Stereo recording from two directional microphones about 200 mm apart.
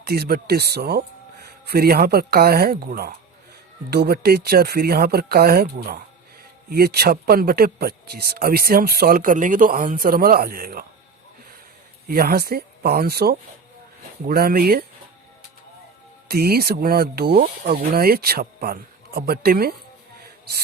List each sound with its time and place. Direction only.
0.0 s speech: 50° right (ahead or behind)
12.0 s speech: 50° right (ahead or behind)
16.3 s speech: 50° right (ahead or behind)